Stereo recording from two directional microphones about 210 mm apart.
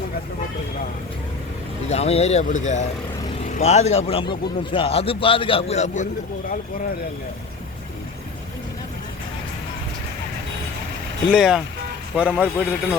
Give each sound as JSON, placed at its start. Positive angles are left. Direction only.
{"t": 1.9, "sound": "speech", "side_deg": 30}
{"t": 11.3, "sound": "a man's voice", "side_deg": -5}